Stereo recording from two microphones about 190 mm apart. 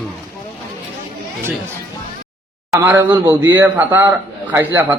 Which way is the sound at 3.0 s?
25° right (ahead or behind).